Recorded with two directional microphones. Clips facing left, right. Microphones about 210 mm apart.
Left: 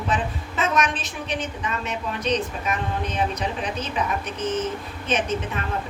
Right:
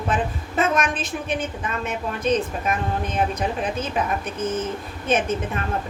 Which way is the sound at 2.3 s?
50° right (ahead or behind).